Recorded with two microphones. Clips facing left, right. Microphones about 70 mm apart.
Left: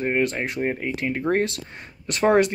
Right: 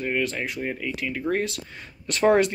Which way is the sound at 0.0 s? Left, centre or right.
Left.